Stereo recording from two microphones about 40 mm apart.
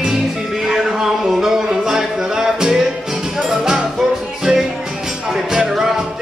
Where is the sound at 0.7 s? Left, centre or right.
Centre.